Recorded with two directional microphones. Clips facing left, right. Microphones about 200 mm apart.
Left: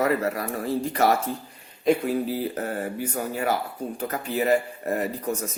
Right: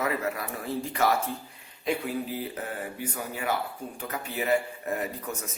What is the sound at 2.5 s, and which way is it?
Speech, 45° left (ahead or behind).